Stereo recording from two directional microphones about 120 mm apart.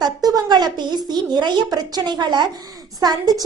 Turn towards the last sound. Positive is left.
turn(degrees=-30)  # may be behind; listen again after turning